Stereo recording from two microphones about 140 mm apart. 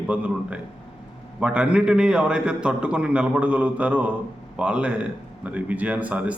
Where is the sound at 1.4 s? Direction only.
10° right (ahead or behind).